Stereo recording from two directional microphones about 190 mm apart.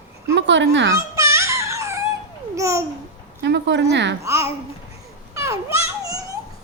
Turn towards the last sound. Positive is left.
turn(degrees=-15)  # may be behind; listen again after turning